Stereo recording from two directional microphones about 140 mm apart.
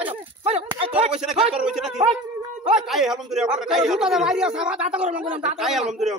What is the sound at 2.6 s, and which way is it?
A man's voice, 5° right (ahead or behind).